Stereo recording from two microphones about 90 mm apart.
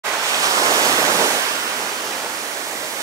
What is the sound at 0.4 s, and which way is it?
Waves, 40° right (ahead or behind).